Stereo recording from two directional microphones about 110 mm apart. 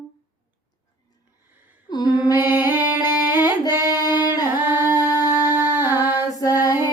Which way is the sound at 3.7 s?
25° right (ahead or behind).